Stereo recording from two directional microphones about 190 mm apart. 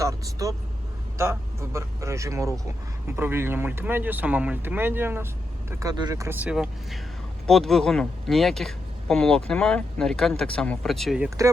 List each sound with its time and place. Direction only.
0.0 s vehicle: 15° right (ahead or behind)
1.2 s speech: 15° right (ahead or behind)